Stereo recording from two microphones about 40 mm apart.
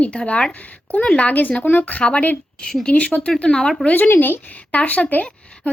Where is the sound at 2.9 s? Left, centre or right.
Left.